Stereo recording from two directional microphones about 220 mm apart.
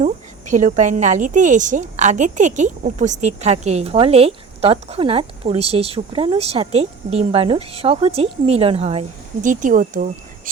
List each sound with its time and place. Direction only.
0.5 s a woman's voice: 35° right (ahead or behind)